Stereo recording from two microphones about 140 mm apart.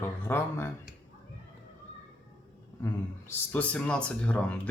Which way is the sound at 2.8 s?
15° left (ahead or behind).